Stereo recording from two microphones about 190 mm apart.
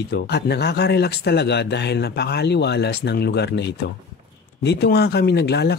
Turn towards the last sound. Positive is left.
turn(degrees=60)  # may be behind; listen again after turning